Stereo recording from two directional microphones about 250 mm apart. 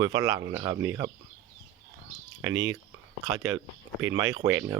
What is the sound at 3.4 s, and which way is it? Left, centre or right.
Speech, centre.